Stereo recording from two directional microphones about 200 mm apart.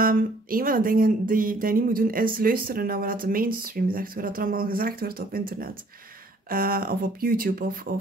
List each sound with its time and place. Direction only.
0.0 s speech: 45° right (ahead or behind)